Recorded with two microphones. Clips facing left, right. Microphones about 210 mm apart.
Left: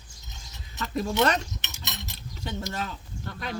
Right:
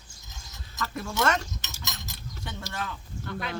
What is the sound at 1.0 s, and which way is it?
Speech, 20° left (ahead or behind).